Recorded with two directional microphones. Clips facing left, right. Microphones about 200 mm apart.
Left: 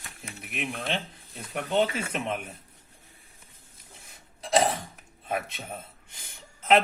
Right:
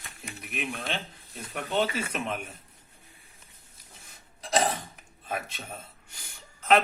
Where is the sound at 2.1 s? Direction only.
25° left (ahead or behind).